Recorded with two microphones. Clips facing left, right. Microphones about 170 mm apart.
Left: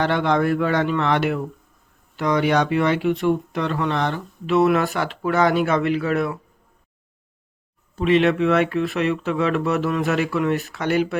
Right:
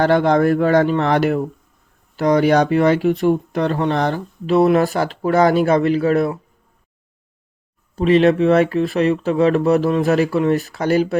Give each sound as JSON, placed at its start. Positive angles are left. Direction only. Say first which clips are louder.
{"t": 0.0, "sound": "speech", "louder": "right 5 dB", "side_deg": -40}
{"t": 7.9, "sound": "speech", "louder": "right 4 dB", "side_deg": -35}